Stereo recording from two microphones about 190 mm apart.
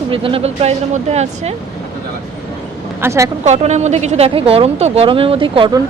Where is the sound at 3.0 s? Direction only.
15° right (ahead or behind).